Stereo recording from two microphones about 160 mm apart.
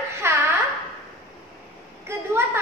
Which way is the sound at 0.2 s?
15° right (ahead or behind).